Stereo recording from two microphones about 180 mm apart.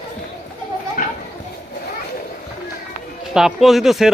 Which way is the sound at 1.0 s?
50° left (ahead or behind).